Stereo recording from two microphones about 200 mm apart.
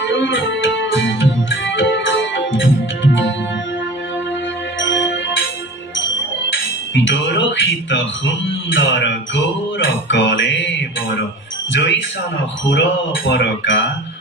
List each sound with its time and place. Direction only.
0.0 s music: 65° left (ahead or behind)
4.7 s music: 70° left (ahead or behind)
6.9 s music: 70° left (ahead or behind)
11.7 s speech: 65° left (ahead or behind)
12.6 s a sound: 70° left (ahead or behind)